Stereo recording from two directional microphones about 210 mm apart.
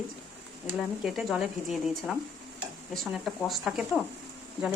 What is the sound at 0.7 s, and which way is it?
Speech, centre (ahead or behind).